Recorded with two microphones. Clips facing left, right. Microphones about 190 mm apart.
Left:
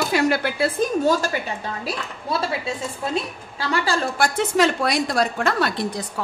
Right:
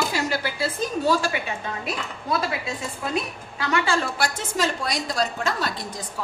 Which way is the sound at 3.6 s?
35° left (ahead or behind).